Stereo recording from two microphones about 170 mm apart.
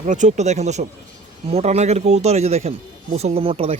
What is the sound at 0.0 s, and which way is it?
Speech, 45° right (ahead or behind).